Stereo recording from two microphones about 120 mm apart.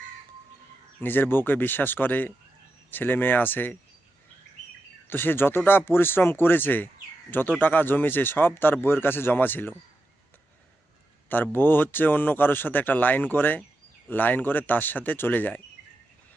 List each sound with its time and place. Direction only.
1.0 s speech: 15° left (ahead or behind)
5.0 s speech: 20° left (ahead or behind)
11.3 s speech: 15° left (ahead or behind)